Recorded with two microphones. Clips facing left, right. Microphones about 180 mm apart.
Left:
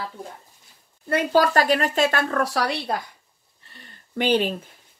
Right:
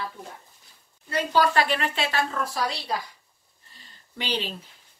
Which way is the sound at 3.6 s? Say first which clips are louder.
Left 6 dB; 65° left (ahead or behind).